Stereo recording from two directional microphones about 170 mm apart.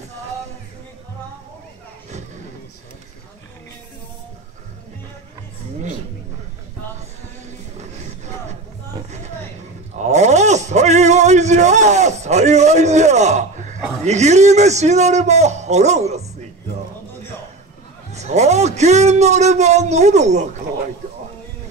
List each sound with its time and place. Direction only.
9.9 s a sound: 40° right (ahead or behind)
14.0 s a man's voice: 40° right (ahead or behind)
18.1 s a man's voice: 40° right (ahead or behind)